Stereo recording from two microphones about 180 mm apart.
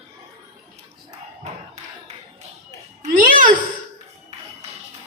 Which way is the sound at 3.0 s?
45° right (ahead or behind).